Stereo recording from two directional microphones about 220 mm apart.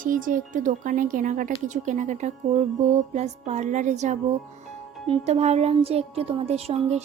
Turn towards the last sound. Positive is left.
turn(degrees=-30)  # may be behind; listen again after turning